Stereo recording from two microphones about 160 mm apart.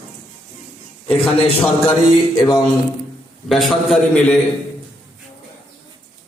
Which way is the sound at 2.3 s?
25° left (ahead or behind).